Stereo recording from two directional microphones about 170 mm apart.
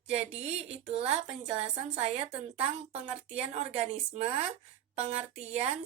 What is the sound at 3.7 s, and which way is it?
A woman's voice, 35° right (ahead or behind).